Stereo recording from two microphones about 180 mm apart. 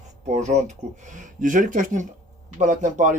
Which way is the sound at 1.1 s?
45° right (ahead or behind).